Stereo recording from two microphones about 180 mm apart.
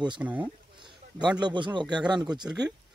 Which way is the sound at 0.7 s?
25° right (ahead or behind).